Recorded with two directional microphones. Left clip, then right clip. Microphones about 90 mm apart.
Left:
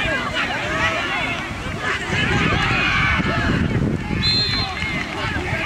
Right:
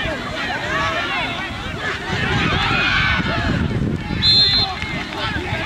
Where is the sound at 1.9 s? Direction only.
Centre (ahead or behind).